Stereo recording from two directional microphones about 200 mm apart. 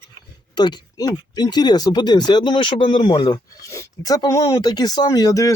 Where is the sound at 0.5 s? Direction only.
20° left (ahead or behind).